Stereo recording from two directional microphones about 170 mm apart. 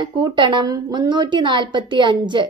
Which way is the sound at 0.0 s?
25° right (ahead or behind).